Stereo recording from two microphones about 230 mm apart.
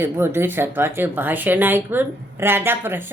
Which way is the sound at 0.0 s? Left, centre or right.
Centre.